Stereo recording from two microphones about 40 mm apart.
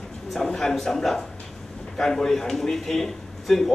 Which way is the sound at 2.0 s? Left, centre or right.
Centre.